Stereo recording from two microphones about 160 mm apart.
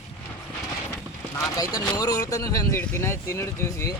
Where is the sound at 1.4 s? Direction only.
25° left (ahead or behind).